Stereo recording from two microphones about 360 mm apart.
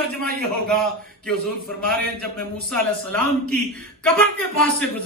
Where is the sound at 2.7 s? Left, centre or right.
Centre.